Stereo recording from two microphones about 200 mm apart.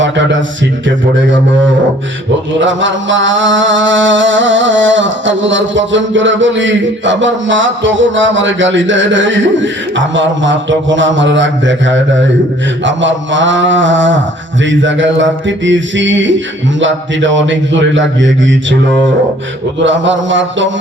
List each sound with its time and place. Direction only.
0.9 s mantra: 65° right (ahead or behind)
19.8 s mantra: 65° right (ahead or behind)